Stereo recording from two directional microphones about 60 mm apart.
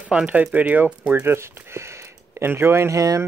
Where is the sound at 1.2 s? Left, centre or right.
Right.